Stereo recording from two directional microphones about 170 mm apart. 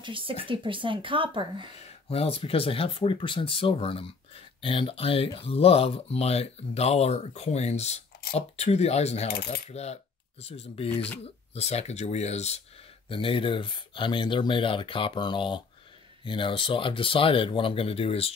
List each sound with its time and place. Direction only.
0.0 s speech: 30° right (ahead or behind)
2.0 s speech: 35° left (ahead or behind)
9.3 s coin: 70° left (ahead or behind)
9.7 s speech: 40° left (ahead or behind)
10.9 s speech: 10° left (ahead or behind)
11.5 s speech: 40° left (ahead or behind)